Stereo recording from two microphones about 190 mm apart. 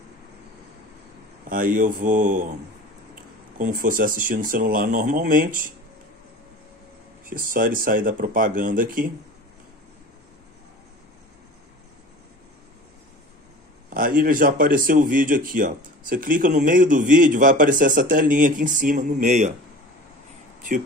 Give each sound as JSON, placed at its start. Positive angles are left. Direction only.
{"t": 1.5, "sound": "speech", "side_deg": -45}
{"t": 3.5, "sound": "speech", "side_deg": -45}
{"t": 7.2, "sound": "speech", "side_deg": -45}
{"t": 13.8, "sound": "speech", "side_deg": -45}